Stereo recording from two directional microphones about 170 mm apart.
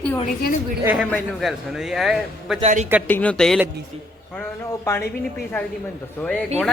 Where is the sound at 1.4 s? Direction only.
Centre (ahead or behind).